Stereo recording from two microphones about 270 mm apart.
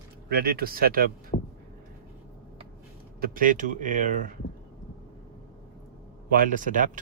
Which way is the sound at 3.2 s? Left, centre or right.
Right.